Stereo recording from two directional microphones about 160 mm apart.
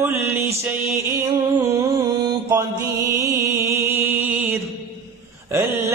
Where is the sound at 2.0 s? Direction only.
25° right (ahead or behind); by 4.5 s 10° right (ahead or behind).